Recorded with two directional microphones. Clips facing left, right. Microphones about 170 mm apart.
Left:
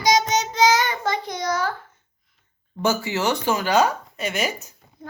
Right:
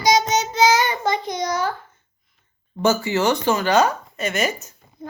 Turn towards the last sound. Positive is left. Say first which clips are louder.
# right 3 dB
turn(degrees=10)  # may be behind; listen again after turning